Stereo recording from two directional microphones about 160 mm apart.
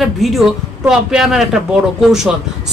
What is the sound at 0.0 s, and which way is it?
Speech, centre (ahead or behind).